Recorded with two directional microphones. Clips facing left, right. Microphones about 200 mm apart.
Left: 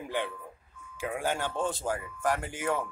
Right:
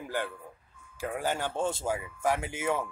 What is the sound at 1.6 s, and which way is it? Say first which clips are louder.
Speech: right 1 dB; 25° right (ahead or behind).